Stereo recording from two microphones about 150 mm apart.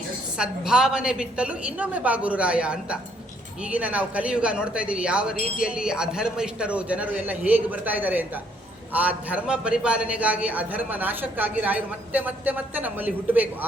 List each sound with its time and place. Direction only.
0.3 s speech: 5° right (ahead or behind)